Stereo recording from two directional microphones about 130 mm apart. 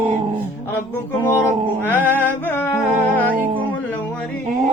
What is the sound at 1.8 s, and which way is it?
Music, 15° left (ahead or behind).